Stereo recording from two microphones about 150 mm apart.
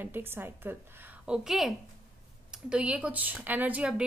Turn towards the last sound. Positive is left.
turn(degrees=-10)  # may be behind; listen again after turning